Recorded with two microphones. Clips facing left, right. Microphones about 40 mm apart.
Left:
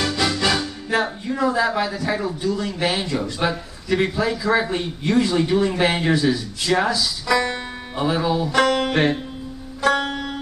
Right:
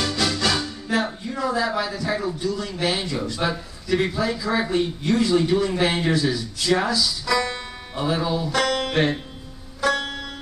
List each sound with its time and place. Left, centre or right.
0.0 s music: centre
1.3 s a man's voice: centre
9.8 s music: centre